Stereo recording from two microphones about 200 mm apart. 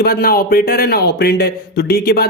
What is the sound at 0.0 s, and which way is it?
Speech, 50° left (ahead or behind).